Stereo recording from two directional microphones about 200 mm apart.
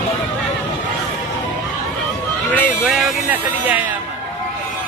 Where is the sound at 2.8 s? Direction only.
5° right (ahead or behind).